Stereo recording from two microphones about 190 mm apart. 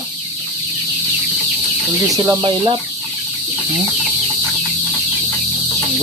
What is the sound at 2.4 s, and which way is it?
Speech, 30° right (ahead or behind).